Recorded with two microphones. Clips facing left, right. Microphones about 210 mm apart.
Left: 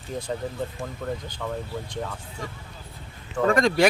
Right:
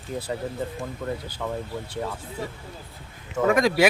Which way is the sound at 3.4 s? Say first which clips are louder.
Even; 5° right (ahead or behind).